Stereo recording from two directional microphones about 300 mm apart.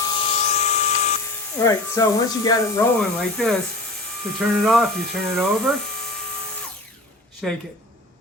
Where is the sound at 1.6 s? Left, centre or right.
Centre.